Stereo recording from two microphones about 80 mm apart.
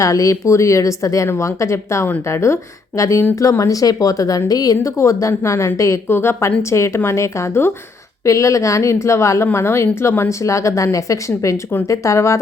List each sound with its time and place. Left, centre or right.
0.0 s a woman's voice: left